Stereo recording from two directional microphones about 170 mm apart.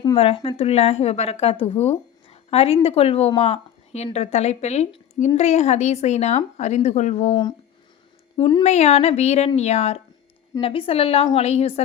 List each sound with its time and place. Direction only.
0.0 s a woman's voice: 30° left (ahead or behind)
8.4 s a woman's voice: 30° left (ahead or behind)